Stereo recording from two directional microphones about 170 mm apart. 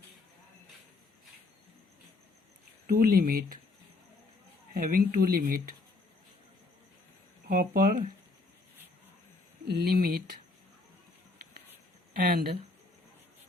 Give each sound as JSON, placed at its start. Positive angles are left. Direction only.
{"t": 2.8, "sound": "speech", "side_deg": -55}
{"t": 4.7, "sound": "speech", "side_deg": -60}
{"t": 7.4, "sound": "speech", "side_deg": -60}
{"t": 9.6, "sound": "speech", "side_deg": -60}
{"t": 12.1, "sound": "speech", "side_deg": -60}